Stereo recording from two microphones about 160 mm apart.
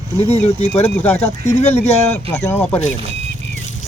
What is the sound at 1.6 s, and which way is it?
Speech, 40° left (ahead or behind).